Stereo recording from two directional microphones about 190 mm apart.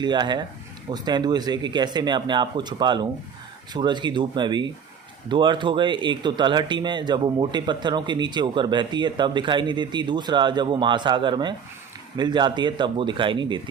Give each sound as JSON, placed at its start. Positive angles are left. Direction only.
{"t": 0.0, "sound": "speech", "side_deg": -25}